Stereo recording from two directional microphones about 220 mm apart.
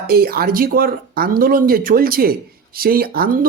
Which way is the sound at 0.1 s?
45° right (ahead or behind).